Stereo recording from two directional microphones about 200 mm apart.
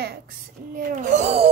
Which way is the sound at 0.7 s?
40° right (ahead or behind).